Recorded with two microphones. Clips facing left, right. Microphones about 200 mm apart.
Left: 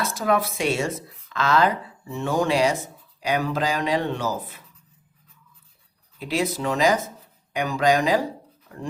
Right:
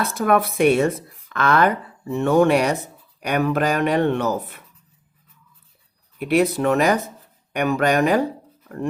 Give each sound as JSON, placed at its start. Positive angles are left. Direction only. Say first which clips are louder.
{"t": 0.0, "sound": "speech", "louder": "right 4 dB", "side_deg": -55}
{"t": 6.1, "sound": "speech", "louder": "right 7 dB", "side_deg": -60}